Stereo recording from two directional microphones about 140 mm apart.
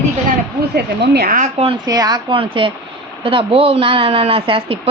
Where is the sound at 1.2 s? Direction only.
90° right.